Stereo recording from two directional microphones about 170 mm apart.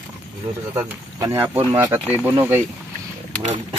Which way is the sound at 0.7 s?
15° right (ahead or behind).